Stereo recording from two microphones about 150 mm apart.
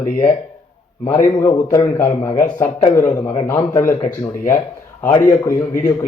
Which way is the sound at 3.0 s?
25° left (ahead or behind).